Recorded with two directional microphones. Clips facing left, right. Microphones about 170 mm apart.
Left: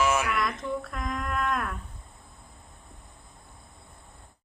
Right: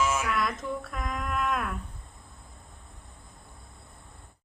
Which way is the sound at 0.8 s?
Centre (ahead or behind).